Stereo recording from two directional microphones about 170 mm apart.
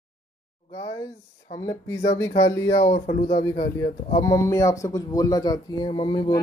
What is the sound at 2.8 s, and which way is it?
Speech, 35° left (ahead or behind).